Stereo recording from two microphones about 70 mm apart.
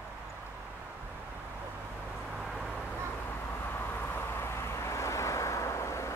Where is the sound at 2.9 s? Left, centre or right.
Left.